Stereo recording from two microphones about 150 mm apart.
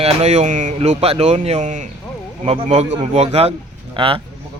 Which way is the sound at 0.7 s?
45° right (ahead or behind).